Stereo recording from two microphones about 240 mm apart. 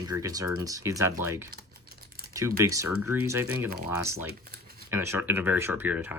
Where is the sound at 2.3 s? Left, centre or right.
Centre.